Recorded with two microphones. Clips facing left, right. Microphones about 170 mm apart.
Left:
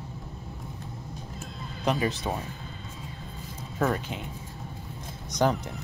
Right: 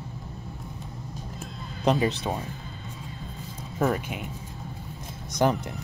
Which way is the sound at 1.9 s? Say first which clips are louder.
Right 4 dB; 25° right (ahead or behind).